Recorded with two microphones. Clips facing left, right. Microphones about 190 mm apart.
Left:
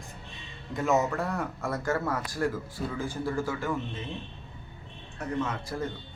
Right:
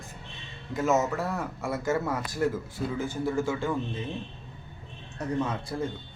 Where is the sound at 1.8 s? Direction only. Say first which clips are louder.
Right 2 dB; 20° right (ahead or behind).